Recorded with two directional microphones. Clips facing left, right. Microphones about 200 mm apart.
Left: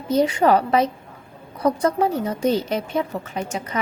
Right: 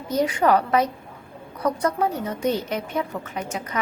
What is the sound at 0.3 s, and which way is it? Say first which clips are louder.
Speech: left 2 dB; 30° left (ahead or behind).